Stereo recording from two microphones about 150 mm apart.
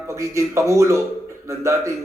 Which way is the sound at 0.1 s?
20° right (ahead or behind).